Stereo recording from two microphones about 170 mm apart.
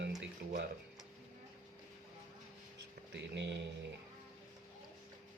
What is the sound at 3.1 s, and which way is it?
Speech, 90° right.